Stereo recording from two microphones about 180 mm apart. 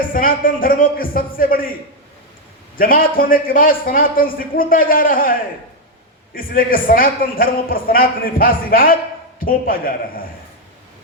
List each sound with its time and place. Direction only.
0.1 s a man's voice: 50° left (ahead or behind)
2.7 s a man's voice: 50° left (ahead or behind)